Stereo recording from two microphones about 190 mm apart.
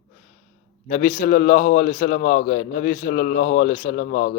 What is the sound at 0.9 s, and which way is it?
A man's voice, 40° left (ahead or behind).